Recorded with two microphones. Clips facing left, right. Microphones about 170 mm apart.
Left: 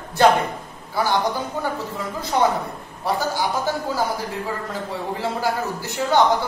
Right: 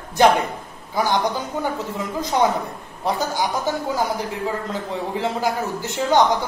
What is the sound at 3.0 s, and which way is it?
Speech, 20° right (ahead or behind).